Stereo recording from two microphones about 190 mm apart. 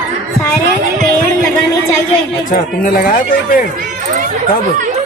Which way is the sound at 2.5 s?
45° left (ahead or behind).